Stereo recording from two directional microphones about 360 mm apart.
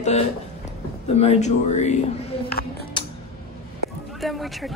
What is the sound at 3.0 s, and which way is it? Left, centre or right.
Tick-tock, centre.